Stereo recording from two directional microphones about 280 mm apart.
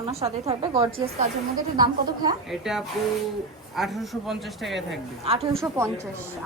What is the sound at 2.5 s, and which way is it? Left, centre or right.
Speech, centre.